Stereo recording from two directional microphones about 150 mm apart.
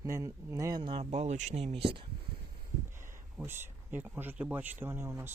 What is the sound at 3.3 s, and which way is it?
Speech, 15° right (ahead or behind).